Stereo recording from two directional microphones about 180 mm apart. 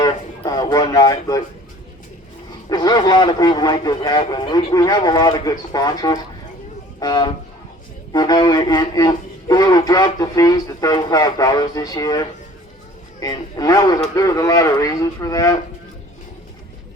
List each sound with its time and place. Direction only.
0.0 s speech: 20° left (ahead or behind)
2.6 s speech: 20° left (ahead or behind)